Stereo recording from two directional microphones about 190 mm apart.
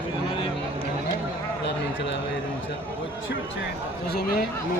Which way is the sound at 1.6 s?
65° left (ahead or behind).